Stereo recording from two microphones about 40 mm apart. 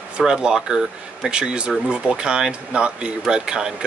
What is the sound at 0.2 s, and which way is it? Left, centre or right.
Speech, centre.